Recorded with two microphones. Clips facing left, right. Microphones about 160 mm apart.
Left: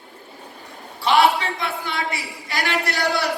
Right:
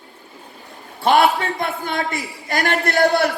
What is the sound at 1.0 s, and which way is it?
A man's voice, 50° right (ahead or behind).